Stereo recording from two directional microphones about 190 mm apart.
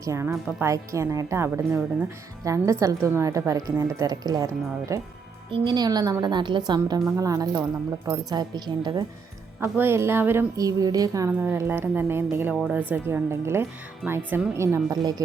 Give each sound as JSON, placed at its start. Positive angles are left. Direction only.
{"t": 0.0, "sound": "a woman's voice", "side_deg": -15}
{"t": 9.6, "sound": "speech", "side_deg": -10}